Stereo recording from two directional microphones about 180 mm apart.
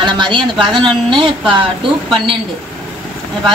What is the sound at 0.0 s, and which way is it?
Speech, 25° right (ahead or behind).